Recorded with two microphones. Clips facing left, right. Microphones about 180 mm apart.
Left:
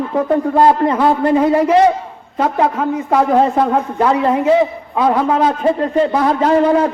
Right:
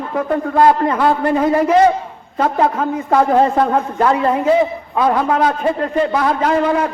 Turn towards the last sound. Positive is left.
turn(degrees=30)  # may be behind; listen again after turning